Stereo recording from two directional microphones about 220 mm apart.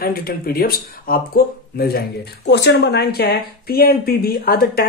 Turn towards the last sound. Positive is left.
turn(degrees=45)  # may be behind; listen again after turning